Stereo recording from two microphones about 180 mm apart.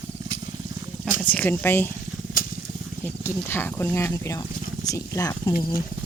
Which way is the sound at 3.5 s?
10° left (ahead or behind).